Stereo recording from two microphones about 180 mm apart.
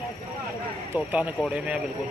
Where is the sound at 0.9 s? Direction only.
10° right (ahead or behind).